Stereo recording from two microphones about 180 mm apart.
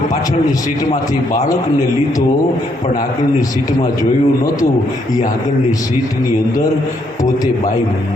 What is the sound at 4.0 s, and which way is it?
Speech, 20° left (ahead or behind).